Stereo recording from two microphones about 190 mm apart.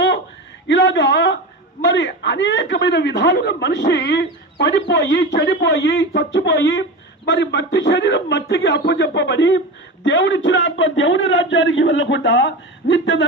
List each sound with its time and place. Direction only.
0.7 s a man's voice: 70° left (ahead or behind)